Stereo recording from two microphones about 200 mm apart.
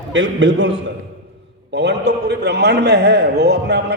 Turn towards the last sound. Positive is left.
turn(degrees=-55)  # may be behind; listen again after turning